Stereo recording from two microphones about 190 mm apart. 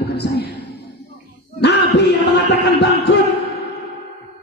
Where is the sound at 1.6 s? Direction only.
65° left (ahead or behind).